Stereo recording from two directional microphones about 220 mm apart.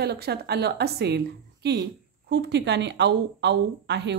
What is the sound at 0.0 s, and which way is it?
Speech, 45° right (ahead or behind).